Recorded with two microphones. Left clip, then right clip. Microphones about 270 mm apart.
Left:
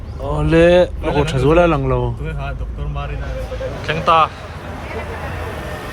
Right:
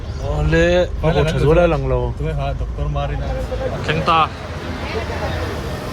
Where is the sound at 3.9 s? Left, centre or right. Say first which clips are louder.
Left 2 dB; centre.